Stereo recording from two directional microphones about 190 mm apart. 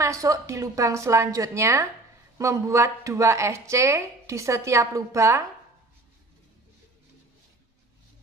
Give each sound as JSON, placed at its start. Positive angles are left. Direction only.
{"t": 0.0, "sound": "speech", "side_deg": -15}